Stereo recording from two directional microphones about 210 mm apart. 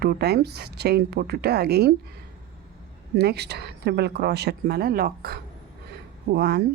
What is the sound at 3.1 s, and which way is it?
Speech, 50° right (ahead or behind).